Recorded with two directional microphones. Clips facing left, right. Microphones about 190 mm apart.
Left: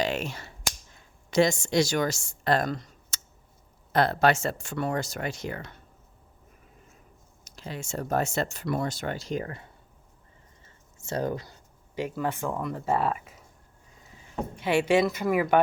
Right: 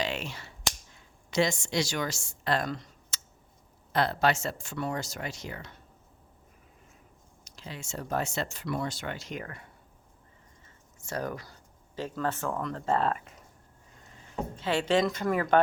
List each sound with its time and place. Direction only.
0.0 s cap gun: 45° left (ahead or behind)
1.3 s speech: 45° left (ahead or behind)
7.4 s speech: 50° left (ahead or behind); by 9.6 s 30° left (ahead or behind)
10.9 s speech: 25° left (ahead or behind)
11.9 s speech: 15° left (ahead or behind)
14.5 s speech: 15° left (ahead or behind)